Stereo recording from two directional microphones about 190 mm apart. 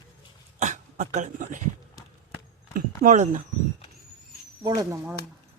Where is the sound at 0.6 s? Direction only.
40° right (ahead or behind).